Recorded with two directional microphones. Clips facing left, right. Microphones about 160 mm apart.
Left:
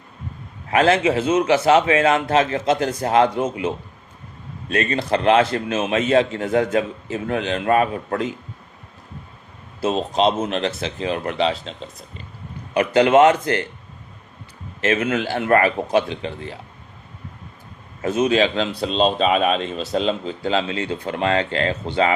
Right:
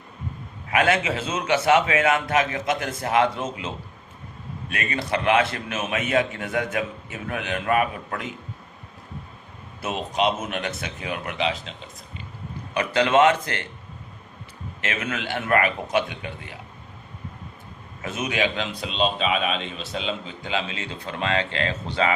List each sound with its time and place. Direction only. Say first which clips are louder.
0.7 s a man's voice: left 5 dB; 30° left (ahead or behind)
4.7 s a man's voice: left 6 dB; 30° left (ahead or behind)
9.8 s a man's voice: left 5 dB; 30° left (ahead or behind)
14.8 s a man's voice: left 9 dB; 30° left (ahead or behind)
18.0 s speech: left 8 dB; 30° left (ahead or behind)